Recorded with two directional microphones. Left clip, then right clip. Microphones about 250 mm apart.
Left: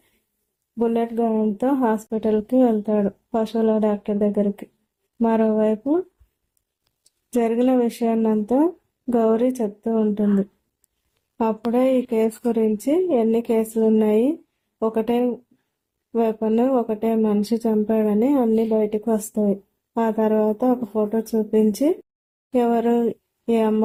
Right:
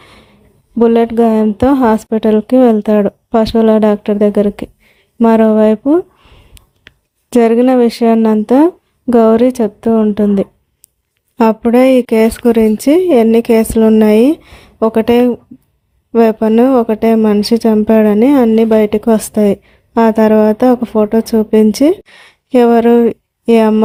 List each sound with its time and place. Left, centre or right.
0.8 s speech: right
7.3 s speech: right
11.3 s speech: right